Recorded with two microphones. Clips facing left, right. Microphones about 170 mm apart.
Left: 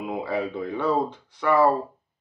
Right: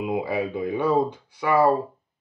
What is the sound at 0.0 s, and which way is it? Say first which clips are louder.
Speech: right 2 dB; 15° right (ahead or behind).